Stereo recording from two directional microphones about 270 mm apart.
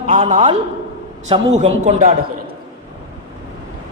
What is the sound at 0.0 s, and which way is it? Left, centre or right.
A man's voice, right.